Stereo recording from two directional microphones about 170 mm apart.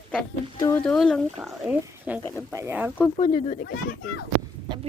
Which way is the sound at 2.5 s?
15° right (ahead or behind).